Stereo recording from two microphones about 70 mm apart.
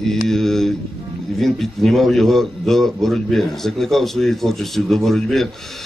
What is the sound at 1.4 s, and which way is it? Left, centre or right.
A man's voice, centre.